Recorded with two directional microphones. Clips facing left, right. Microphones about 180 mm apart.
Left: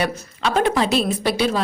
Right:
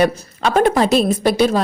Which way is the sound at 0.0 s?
45° right (ahead or behind).